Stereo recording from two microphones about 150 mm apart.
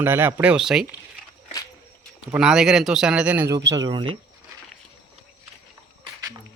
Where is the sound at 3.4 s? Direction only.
20° right (ahead or behind).